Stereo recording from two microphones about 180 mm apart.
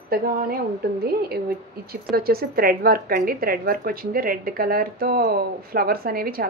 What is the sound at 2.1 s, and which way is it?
A woman's voice, 55° right (ahead or behind).